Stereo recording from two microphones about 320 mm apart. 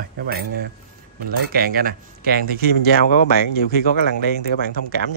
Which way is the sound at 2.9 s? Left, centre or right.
Left.